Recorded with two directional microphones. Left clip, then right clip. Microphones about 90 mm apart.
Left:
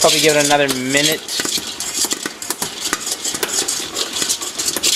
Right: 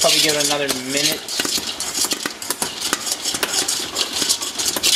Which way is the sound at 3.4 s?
Centre (ahead or behind).